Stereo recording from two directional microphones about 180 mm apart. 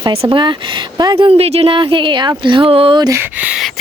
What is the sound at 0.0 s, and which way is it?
Speech, 30° right (ahead or behind).